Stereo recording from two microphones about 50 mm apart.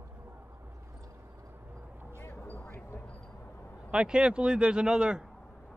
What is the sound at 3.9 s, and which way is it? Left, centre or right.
Speech, centre.